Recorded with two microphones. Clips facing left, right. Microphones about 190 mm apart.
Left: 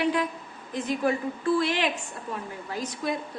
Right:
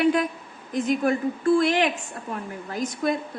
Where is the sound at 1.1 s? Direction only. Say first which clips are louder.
Right 2 dB; 50° right (ahead or behind).